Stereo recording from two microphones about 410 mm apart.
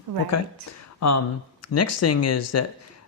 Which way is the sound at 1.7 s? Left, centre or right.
Left.